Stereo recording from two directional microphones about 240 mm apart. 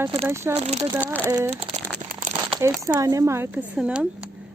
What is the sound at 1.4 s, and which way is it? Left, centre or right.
Speech, right.